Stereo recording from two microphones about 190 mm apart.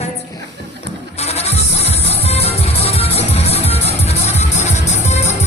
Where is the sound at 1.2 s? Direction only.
35° left (ahead or behind).